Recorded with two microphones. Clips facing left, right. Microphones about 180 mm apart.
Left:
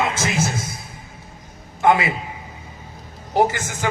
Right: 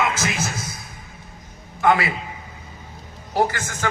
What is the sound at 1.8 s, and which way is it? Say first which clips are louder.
Speech: left 2 dB; 20° left (ahead or behind).